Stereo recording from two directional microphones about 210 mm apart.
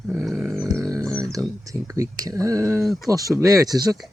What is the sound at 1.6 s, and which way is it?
Speech, 15° right (ahead or behind).